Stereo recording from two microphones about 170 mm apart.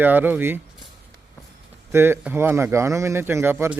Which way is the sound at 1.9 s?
15° right (ahead or behind).